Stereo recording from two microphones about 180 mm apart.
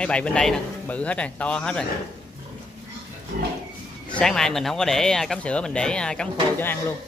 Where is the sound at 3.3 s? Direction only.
55° right (ahead or behind).